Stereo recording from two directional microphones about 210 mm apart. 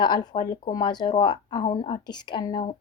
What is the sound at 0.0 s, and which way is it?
Speech, 20° left (ahead or behind).